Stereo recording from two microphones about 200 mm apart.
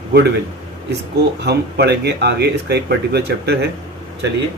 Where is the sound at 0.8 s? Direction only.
55° right (ahead or behind).